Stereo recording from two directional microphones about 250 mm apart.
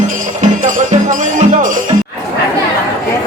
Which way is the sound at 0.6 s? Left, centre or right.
Right.